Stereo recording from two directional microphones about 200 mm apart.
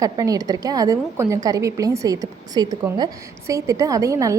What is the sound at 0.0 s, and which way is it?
A woman's voice, 15° right (ahead or behind).